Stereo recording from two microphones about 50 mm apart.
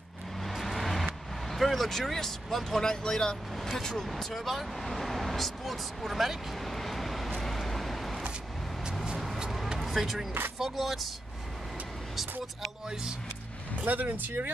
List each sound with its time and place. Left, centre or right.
0.4 s vehicle: centre
1.5 s speech: centre
3.5 s speech: centre
9.4 s music: centre
10.6 s speech: centre
13.8 s speech: right